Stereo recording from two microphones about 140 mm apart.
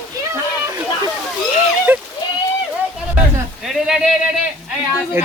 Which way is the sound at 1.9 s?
15° right (ahead or behind).